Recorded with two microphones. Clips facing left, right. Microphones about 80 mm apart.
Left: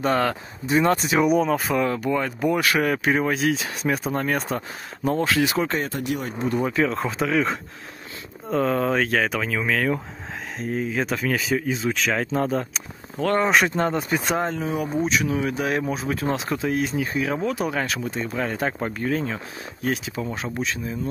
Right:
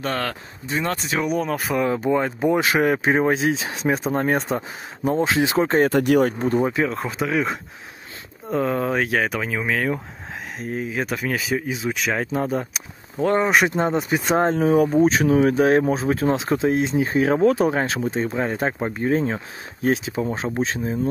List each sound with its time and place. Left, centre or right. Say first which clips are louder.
0.0 s speech: left 4 dB; centre
2.0 s speech: right 3 dB; right
5.8 s speech: right 10 dB; right
6.7 s speech: left 1 dB; centre
13.7 s speech: right 2 dB; centre
14.3 s speech: right 11 dB; right
17.6 s speech: right 5 dB; right
19.0 s speech: right 6 dB; right